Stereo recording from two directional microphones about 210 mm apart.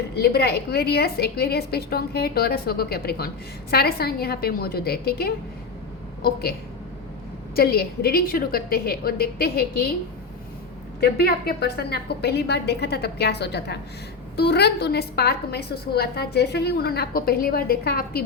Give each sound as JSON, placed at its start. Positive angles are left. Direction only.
{"t": 0.2, "sound": "a woman's voice", "side_deg": 50}
{"t": 11.0, "sound": "a woman's voice", "side_deg": 50}